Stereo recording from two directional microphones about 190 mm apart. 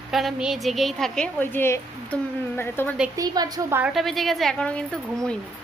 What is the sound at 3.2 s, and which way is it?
Speech, 20° right (ahead or behind).